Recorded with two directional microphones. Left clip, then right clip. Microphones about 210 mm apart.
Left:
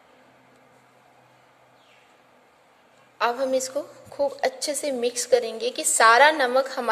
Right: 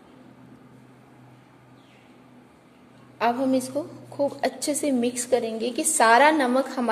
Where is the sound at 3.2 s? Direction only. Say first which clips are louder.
Even; 20° left (ahead or behind).